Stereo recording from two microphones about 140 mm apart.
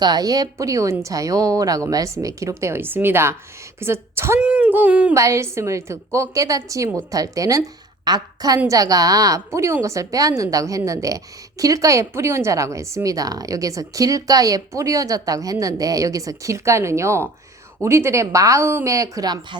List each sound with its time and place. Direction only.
0.0 s a woman's voice: 30° right (ahead or behind); by 5.1 s 10° right (ahead or behind)
5.1 s a woman's voice: 20° right (ahead or behind)